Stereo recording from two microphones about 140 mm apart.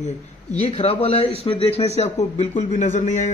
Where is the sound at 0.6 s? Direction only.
45° left (ahead or behind).